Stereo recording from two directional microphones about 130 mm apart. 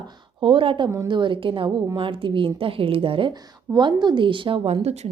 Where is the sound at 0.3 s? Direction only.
40° right (ahead or behind).